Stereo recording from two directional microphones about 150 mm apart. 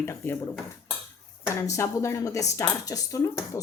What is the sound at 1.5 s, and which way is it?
Speech, 20° left (ahead or behind).